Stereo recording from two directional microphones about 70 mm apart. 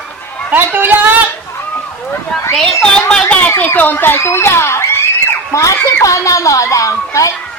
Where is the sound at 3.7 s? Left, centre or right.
Left.